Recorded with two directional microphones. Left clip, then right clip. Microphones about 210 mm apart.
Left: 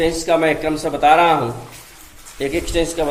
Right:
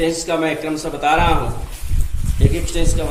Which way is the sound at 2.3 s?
45° left (ahead or behind).